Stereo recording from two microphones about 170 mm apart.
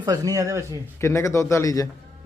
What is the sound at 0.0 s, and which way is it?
Speech, 20° right (ahead or behind).